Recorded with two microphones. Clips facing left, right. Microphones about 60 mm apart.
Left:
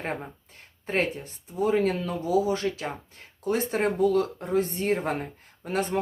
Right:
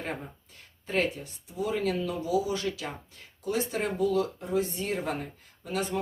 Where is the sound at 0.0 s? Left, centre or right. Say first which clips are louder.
Left 3 dB; left.